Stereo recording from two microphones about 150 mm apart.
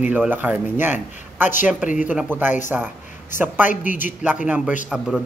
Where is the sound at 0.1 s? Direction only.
10° right (ahead or behind).